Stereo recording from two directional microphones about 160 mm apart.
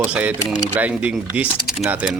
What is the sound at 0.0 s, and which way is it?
Speech, 10° right (ahead or behind).